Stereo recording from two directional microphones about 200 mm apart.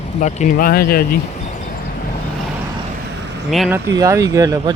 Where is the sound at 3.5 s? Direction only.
Centre (ahead or behind).